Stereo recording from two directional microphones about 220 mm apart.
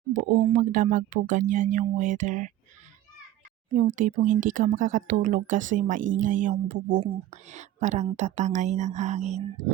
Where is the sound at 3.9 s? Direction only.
35° right (ahead or behind).